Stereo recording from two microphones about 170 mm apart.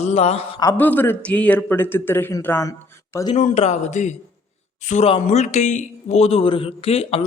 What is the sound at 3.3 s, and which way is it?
Speech, 40° left (ahead or behind).